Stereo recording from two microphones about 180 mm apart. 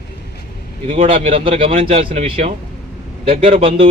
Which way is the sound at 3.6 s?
30° right (ahead or behind).